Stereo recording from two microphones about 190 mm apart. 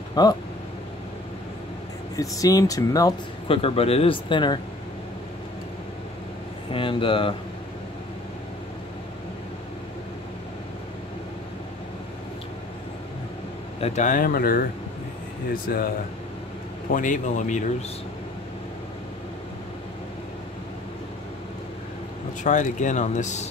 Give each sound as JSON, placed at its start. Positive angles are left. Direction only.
{"t": 0.1, "sound": "speech", "side_deg": 20}
{"t": 2.1, "sound": "speech", "side_deg": 20}
{"t": 6.7, "sound": "speech", "side_deg": 25}
{"t": 13.7, "sound": "speech", "side_deg": 35}
{"t": 16.9, "sound": "speech", "side_deg": 45}
{"t": 22.4, "sound": "speech", "side_deg": 40}